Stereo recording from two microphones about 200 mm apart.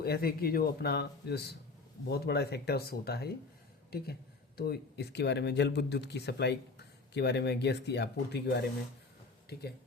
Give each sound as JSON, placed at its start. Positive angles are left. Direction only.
{"t": 0.0, "sound": "speech", "side_deg": 50}